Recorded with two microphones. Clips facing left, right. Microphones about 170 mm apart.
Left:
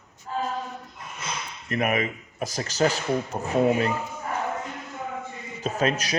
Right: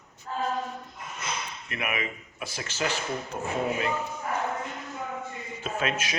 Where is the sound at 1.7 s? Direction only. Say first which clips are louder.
Left 8 dB; 40° left (ahead or behind).